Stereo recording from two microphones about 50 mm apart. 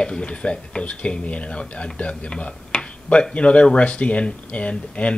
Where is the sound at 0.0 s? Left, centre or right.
Centre.